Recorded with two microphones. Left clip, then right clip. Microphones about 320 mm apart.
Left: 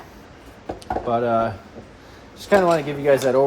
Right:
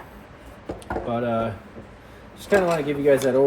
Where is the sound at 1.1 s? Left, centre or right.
Left.